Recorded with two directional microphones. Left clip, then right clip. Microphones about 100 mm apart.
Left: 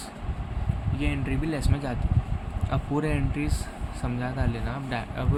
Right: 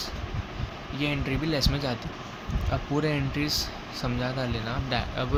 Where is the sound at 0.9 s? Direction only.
20° right (ahead or behind).